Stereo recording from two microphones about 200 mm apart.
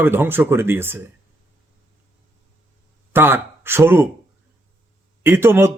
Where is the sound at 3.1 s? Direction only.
10° right (ahead or behind).